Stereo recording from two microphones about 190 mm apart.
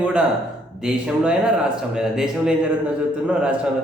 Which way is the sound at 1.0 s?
5° right (ahead or behind).